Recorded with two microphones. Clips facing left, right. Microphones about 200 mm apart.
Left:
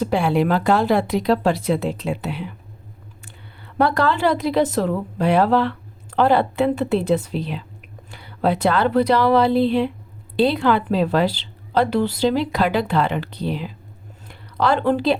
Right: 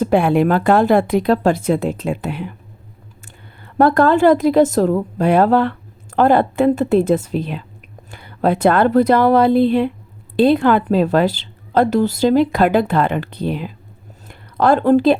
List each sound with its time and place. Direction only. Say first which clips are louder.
0.0 s a woman's voice: right 5 dB; 55° right (ahead or behind)
3.8 s a woman's voice: right 6 dB; 50° right (ahead or behind)